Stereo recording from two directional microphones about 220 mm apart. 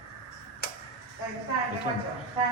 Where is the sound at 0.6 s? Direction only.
45° left (ahead or behind).